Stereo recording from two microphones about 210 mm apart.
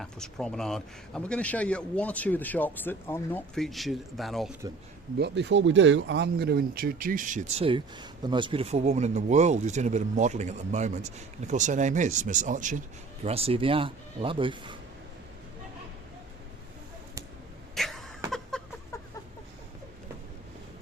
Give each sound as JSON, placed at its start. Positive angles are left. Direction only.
{"t": 0.0, "sound": "speech", "side_deg": 0}
{"t": 5.1, "sound": "speech", "side_deg": -55}
{"t": 17.7, "sound": "cough", "side_deg": 0}
{"t": 18.5, "sound": "chicken", "side_deg": 0}